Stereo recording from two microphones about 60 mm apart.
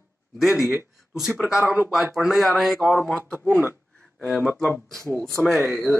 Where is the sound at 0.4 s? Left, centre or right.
Centre.